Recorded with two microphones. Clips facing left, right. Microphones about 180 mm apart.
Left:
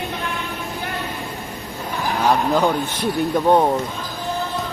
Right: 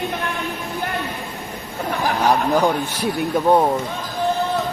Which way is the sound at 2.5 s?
10° right (ahead or behind).